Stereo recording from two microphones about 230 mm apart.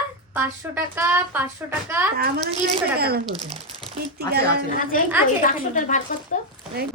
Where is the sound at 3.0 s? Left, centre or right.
Right.